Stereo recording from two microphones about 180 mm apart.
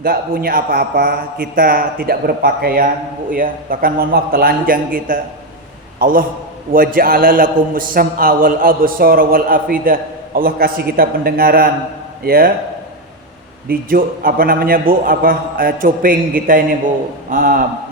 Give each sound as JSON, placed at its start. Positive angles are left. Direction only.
{"t": 0.0, "sound": "a man's voice", "side_deg": -55}
{"t": 13.7, "sound": "a man's voice", "side_deg": -55}